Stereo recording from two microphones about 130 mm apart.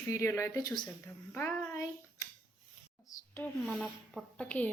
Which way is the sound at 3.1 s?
25° left (ahead or behind).